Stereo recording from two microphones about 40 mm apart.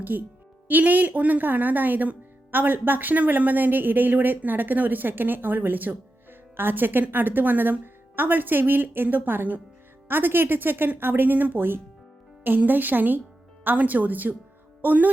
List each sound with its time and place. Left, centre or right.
0.0 s speech: right
6.6 s speech: right
12.4 s speech: right